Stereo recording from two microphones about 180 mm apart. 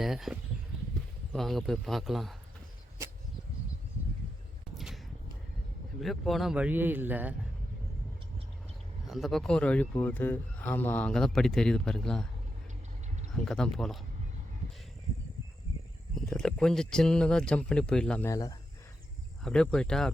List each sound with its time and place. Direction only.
0.0 s speech: centre (ahead or behind)
4.7 s a sound: centre (ahead or behind)
6.0 s speech: centre (ahead or behind)
9.0 s speech: centre (ahead or behind)
13.3 s speech: 5° left (ahead or behind)
16.1 s speech: centre (ahead or behind)
18.3 s speech: 20° left (ahead or behind)
19.4 s speech: 5° left (ahead or behind)